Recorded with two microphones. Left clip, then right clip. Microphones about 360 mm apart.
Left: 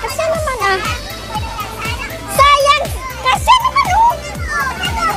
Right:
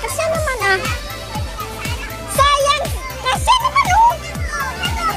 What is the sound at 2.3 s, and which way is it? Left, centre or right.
Music, right.